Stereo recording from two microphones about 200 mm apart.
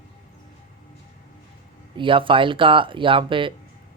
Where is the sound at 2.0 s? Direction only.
25° right (ahead or behind).